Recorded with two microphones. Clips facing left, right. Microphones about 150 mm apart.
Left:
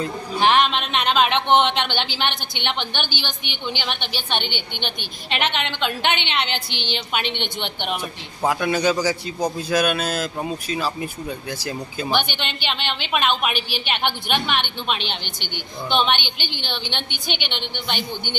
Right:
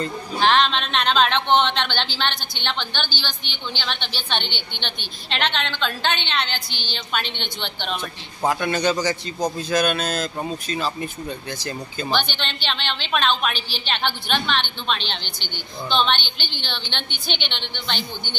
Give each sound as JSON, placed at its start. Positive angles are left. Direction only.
{"t": 0.0, "sound": "a man's voice", "side_deg": 15}
{"t": 8.4, "sound": "a man's voice", "side_deg": 5}